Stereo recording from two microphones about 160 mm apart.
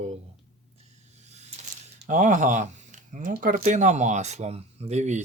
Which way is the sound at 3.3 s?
60° right (ahead or behind).